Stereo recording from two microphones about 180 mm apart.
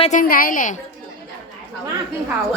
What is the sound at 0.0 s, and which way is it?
Speech, 45° left (ahead or behind).